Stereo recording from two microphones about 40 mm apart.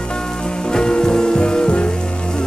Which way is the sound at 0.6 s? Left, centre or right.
Left.